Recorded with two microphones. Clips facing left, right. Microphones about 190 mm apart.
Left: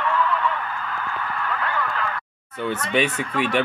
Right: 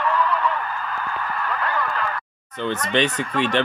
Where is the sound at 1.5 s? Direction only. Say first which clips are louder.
Right 1 dB; 40° right (ahead or behind).